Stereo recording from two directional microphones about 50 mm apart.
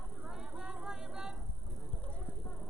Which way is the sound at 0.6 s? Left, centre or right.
Centre.